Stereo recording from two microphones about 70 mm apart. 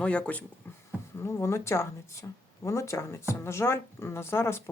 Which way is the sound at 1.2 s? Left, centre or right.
Left.